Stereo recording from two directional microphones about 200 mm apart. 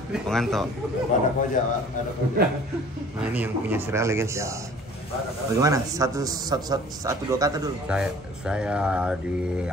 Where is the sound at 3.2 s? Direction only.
10° right (ahead or behind).